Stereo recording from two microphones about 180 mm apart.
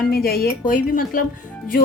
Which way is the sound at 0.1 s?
55° left (ahead or behind).